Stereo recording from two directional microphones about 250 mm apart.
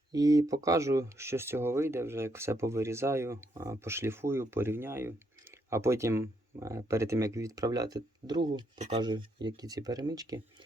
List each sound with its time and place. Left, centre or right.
0.1 s speech: centre